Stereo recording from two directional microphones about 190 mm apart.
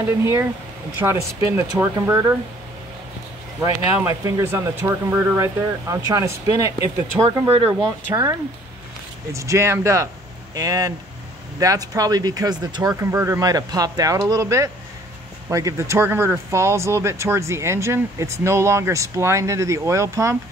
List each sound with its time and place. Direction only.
0.2 s speech: 15° right (ahead or behind)
3.6 s speech: 15° right (ahead or behind)
7.4 s speech: 30° right (ahead or behind)